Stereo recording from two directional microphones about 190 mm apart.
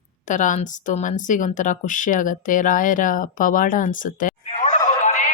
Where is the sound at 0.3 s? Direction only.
40° left (ahead or behind).